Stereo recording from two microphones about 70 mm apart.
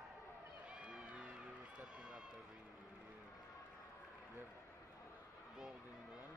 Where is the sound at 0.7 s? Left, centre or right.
Centre.